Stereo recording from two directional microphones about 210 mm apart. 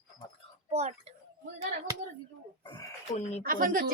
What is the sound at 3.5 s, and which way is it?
Speech, 40° right (ahead or behind).